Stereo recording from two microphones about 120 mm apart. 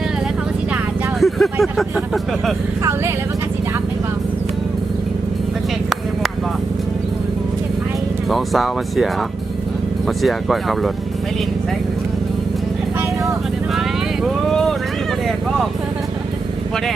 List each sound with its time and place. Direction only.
1.2 s vehicle: centre (ahead or behind)
8.3 s speech: centre (ahead or behind)
10.1 s speech: centre (ahead or behind)
14.5 s vehicle: 5° left (ahead or behind)